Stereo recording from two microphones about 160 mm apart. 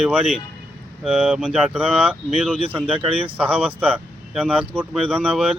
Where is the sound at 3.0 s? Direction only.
35° right (ahead or behind).